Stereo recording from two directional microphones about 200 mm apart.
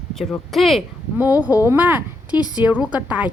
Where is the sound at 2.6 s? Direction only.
5° right (ahead or behind).